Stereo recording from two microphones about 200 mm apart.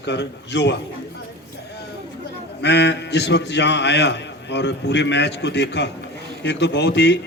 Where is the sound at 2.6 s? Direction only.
60° left (ahead or behind).